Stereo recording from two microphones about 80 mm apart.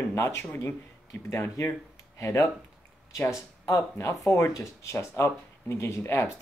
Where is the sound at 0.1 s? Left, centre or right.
Left.